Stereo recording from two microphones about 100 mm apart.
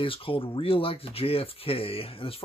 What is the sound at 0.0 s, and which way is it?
Speech, 65° left (ahead or behind).